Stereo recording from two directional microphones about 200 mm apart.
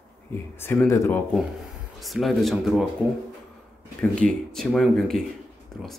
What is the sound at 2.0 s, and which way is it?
Speech, centre (ahead or behind).